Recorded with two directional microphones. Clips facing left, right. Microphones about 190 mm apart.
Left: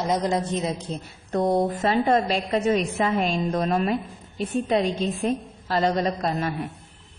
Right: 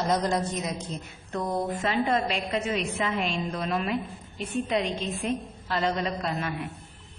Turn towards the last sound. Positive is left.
turn(degrees=35)  # may be behind; listen again after turning